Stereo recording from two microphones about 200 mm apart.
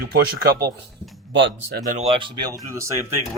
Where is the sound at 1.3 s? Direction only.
65° right (ahead or behind).